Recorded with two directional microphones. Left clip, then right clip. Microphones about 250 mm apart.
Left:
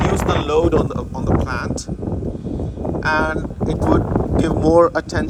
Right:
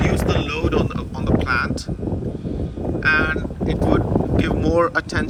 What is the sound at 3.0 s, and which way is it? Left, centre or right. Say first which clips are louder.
Speech: right 1 dB; left.